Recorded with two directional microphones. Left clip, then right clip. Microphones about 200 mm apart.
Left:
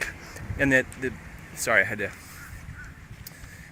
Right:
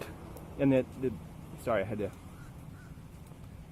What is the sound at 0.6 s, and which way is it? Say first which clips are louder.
Speech: left 6 dB; 10° left (ahead or behind).